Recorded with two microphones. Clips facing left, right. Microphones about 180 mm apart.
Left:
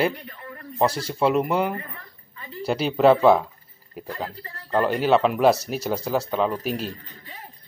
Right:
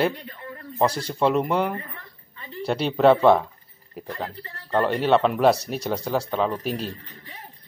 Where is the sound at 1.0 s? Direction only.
5° left (ahead or behind).